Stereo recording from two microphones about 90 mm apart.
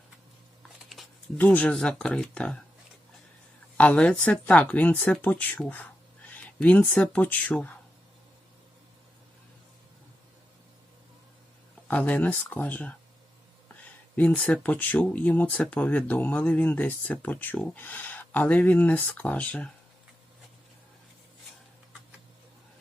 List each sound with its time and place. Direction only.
1.4 s speech: 15° left (ahead or behind)
3.8 s speech: 15° left (ahead or behind)
11.9 s speech: 20° left (ahead or behind)
14.2 s speech: 15° left (ahead or behind)